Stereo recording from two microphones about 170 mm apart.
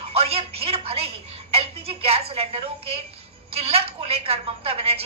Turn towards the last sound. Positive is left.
turn(degrees=-35)  # may be behind; listen again after turning